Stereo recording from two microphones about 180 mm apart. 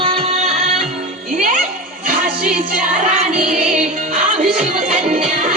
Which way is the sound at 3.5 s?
40° right (ahead or behind).